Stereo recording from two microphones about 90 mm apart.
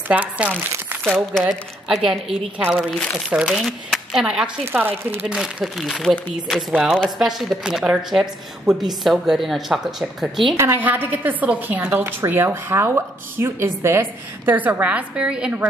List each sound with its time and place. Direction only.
0.1 s speech: 15° right (ahead or behind)
1.5 s a woman's voice: 5° right (ahead or behind)
4.7 s a woman's voice: 25° right (ahead or behind)
5.3 s a woman's voice: centre (ahead or behind)
10.5 s a woman's voice: 30° right (ahead or behind)
10.8 s a woman's voice: 20° right (ahead or behind)